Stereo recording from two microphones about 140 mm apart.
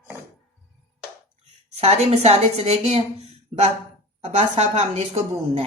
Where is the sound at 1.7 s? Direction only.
50° right (ahead or behind).